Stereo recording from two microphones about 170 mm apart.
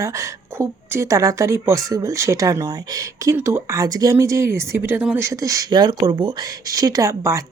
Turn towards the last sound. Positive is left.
turn(degrees=-20)  # may be behind; listen again after turning